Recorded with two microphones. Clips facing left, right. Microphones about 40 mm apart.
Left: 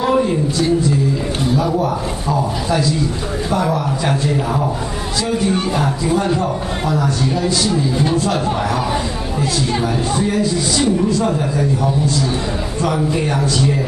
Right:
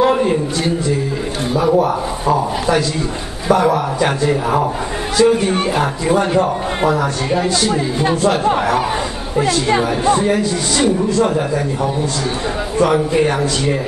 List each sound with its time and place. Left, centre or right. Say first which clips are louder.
0.0 s speech: right 2 dB; right
1.5 s speech: right 4 dB; centre
3.6 s a man's voice: right 3 dB; right
12.7 s speech: right 5 dB; right